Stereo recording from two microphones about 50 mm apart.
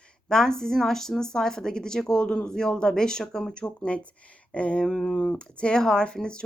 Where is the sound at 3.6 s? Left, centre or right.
Left.